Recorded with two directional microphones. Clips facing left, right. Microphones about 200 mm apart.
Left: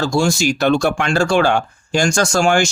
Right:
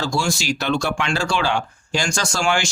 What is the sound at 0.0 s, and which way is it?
Speech, 50° left (ahead or behind).